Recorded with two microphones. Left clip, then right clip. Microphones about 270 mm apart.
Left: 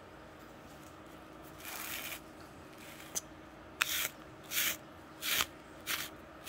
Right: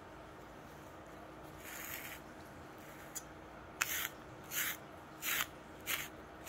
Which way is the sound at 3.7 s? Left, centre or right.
Left.